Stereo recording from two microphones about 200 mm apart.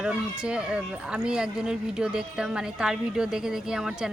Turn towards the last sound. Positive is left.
turn(degrees=-5)  # may be behind; listen again after turning